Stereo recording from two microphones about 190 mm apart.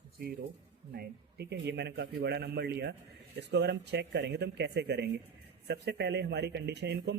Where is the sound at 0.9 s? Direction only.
60° right (ahead or behind).